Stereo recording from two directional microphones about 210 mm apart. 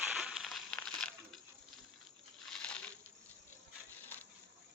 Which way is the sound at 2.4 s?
5° left (ahead or behind).